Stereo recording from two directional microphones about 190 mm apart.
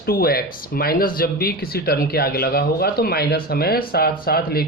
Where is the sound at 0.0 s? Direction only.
50° left (ahead or behind).